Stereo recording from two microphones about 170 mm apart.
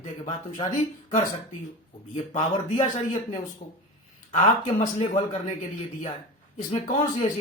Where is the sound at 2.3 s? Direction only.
45° left (ahead or behind).